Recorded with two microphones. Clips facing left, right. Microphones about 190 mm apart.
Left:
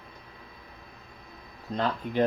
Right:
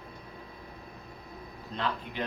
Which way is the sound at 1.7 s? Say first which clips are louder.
Left 7 dB; 45° left (ahead or behind).